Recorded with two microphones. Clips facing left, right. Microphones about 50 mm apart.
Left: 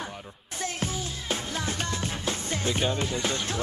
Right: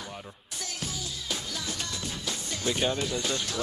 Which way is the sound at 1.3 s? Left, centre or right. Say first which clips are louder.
Left 5 dB; left.